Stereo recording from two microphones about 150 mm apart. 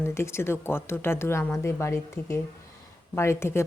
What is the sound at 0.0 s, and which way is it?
A woman's voice, 15° left (ahead or behind).